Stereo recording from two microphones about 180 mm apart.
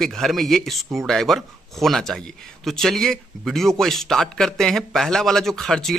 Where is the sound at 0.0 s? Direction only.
Centre (ahead or behind).